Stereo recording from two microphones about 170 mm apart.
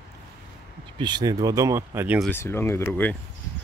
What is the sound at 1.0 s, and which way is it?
Speech, 25° right (ahead or behind).